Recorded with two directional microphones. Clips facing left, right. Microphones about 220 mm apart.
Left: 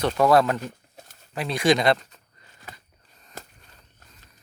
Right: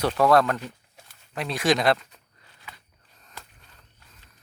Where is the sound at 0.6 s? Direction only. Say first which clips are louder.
Left 3 dB; 45° left (ahead or behind).